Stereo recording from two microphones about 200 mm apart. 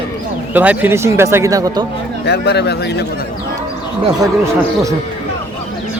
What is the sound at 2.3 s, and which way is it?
Speech, 55° left (ahead or behind).